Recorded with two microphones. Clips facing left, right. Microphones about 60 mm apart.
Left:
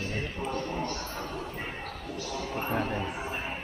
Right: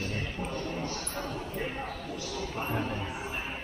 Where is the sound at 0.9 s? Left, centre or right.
Centre.